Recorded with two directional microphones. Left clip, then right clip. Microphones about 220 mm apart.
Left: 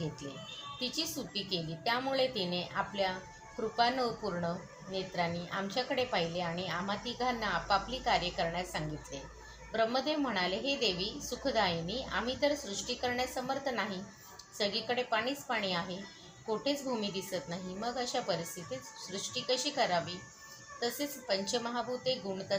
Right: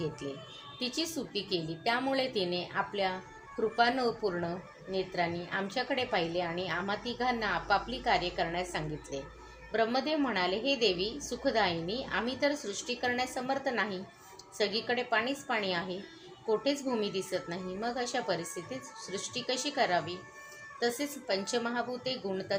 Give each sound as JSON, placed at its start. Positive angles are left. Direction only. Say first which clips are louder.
{"t": 0.8, "sound": "a woman's voice", "louder": "right 2 dB", "side_deg": -35}